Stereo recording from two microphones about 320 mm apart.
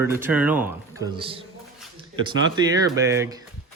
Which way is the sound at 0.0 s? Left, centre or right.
Centre.